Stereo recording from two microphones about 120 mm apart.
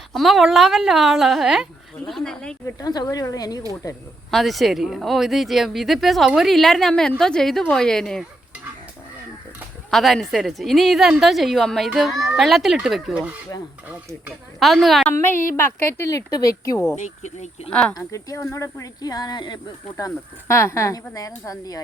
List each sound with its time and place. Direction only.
0.1 s speech: centre (ahead or behind)
2.7 s speech: 35° left (ahead or behind)
4.3 s speech: centre (ahead or behind)
9.9 s speech: centre (ahead or behind)
14.6 s speech: centre (ahead or behind)
15.2 s speech: 20° left (ahead or behind)
16.9 s speech: 75° left (ahead or behind)
17.7 s speech: 10° left (ahead or behind)
17.9 s speech: 25° left (ahead or behind)
20.0 s speech: 25° left (ahead or behind)